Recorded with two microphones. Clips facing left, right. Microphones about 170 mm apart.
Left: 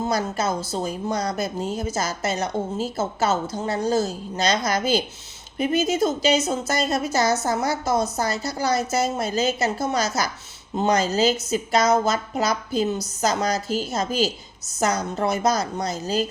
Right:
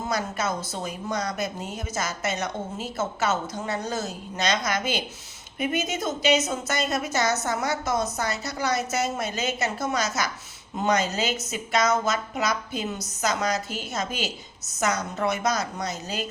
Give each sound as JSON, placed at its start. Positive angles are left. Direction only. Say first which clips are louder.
{"t": 0.0, "sound": "a woman's voice", "louder": "left 4 dB", "side_deg": 35}